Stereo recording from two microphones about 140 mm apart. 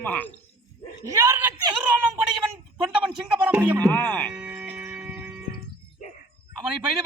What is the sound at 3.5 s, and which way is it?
Speech, 10° right (ahead or behind).